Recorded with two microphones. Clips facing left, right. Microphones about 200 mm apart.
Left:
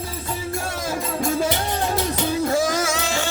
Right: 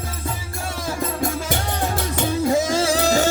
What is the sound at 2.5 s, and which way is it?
Music, 25° right (ahead or behind).